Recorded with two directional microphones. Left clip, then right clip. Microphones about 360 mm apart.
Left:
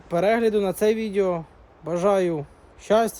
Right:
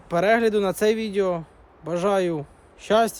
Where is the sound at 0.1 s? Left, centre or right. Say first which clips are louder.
Right 1 dB; centre.